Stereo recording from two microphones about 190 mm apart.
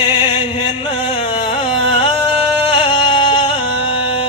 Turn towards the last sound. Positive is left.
turn(degrees=25)  # may be behind; listen again after turning